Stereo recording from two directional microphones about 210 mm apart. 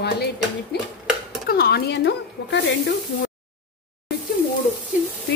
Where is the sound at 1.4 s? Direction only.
45° left (ahead or behind).